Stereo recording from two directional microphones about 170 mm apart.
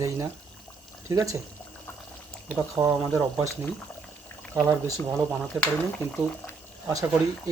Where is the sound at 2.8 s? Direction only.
15° right (ahead or behind).